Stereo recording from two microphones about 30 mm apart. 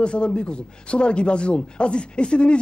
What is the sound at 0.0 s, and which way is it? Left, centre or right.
A man's voice, left.